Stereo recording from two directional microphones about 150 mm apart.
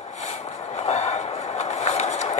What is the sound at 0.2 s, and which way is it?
Vehicle, 50° left (ahead or behind).